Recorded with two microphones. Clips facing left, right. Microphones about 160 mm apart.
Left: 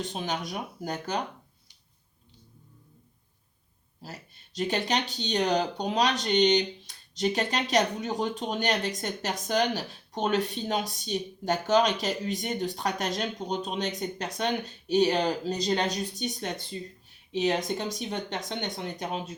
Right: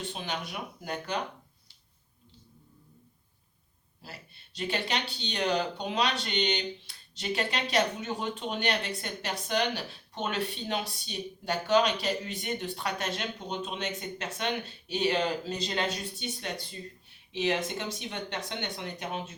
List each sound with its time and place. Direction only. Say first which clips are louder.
0.0 s speech: left 4 dB; 40° left (ahead or behind)
4.0 s speech: left 4 dB; 40° left (ahead or behind)
17.9 s speech: left 4 dB; 40° left (ahead or behind)